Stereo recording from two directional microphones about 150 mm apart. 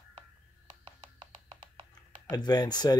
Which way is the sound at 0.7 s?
30° right (ahead or behind).